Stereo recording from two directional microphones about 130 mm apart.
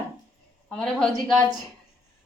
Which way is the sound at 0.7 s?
5° left (ahead or behind).